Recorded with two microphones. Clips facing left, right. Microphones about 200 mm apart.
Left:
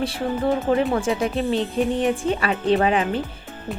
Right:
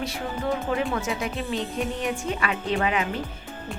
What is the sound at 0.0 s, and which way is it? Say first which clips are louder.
A woman's voice: left 6 dB; 30° left (ahead or behind).